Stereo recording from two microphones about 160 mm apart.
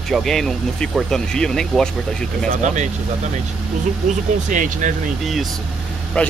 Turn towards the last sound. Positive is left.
turn(degrees=5)  # may be behind; listen again after turning